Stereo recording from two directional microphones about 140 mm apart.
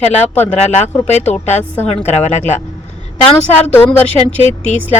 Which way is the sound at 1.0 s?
55° left (ahead or behind).